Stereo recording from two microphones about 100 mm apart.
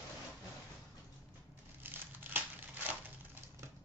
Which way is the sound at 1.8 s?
20° right (ahead or behind).